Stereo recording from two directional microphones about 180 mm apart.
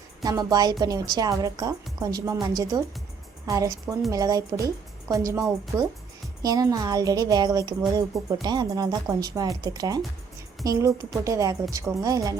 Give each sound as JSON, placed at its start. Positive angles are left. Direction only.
{"t": 0.3, "sound": "a woman's voice", "side_deg": -20}